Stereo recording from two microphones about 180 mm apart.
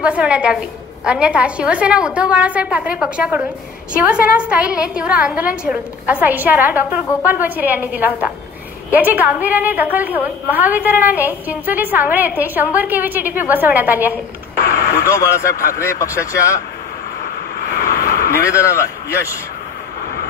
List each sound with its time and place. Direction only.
0.0 s a woman's voice: 5° right (ahead or behind)
15.0 s speech: 15° left (ahead or behind)
18.3 s speech: 15° left (ahead or behind)